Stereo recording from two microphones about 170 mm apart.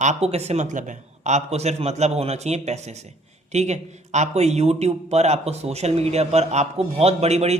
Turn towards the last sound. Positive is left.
turn(degrees=-40)  # may be behind; listen again after turning